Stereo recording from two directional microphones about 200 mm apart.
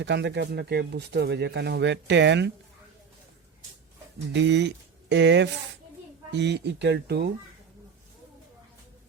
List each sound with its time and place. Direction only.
0.0 s speech: 60° right (ahead or behind)
4.3 s speech: 60° right (ahead or behind)